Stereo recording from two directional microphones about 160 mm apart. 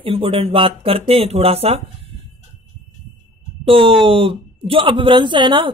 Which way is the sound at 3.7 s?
35° right (ahead or behind).